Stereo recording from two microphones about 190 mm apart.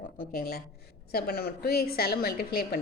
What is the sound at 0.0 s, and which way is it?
A woman's voice, 50° left (ahead or behind).